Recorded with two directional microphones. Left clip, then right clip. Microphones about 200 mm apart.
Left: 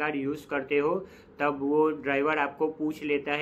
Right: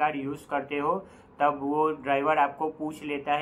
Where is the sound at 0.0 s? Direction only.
15° left (ahead or behind).